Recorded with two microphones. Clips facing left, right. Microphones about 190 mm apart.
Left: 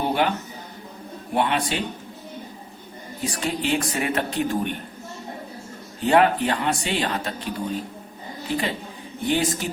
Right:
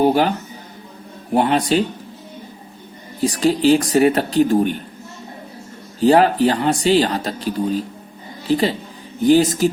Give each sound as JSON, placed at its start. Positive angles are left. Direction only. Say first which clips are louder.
{"t": 0.0, "sound": "speech", "louder": "right 7 dB", "side_deg": -40}
{"t": 1.4, "sound": "speech", "louder": "right 7 dB", "side_deg": -40}
{"t": 3.2, "sound": "speech", "louder": "right 10 dB", "side_deg": -35}
{"t": 6.0, "sound": "speech", "louder": "right 5 dB", "side_deg": -35}